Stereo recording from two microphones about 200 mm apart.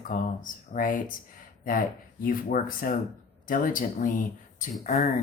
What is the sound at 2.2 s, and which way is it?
Speech, 45° left (ahead or behind).